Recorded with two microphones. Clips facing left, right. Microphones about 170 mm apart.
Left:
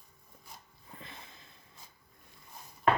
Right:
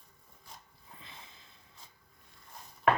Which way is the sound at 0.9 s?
55° left (ahead or behind).